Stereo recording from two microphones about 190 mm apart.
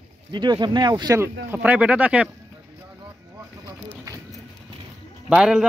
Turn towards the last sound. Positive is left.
turn(degrees=-5)  # may be behind; listen again after turning